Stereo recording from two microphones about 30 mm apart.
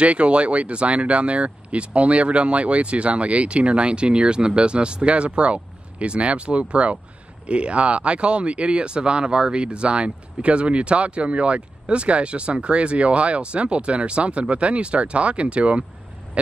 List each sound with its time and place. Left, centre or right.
0.0 s speech: right